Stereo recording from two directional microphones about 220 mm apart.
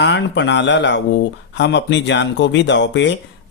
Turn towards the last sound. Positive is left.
turn(degrees=55)  # may be behind; listen again after turning